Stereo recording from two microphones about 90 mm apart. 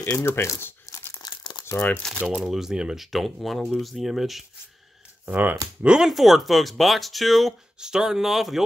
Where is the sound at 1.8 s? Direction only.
15° left (ahead or behind).